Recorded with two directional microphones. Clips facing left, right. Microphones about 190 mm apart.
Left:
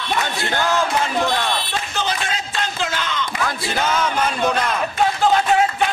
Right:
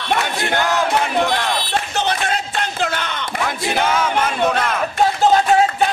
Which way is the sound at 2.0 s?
60° right (ahead or behind).